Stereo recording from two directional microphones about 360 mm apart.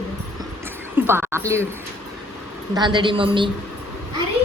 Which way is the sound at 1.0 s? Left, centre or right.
Centre.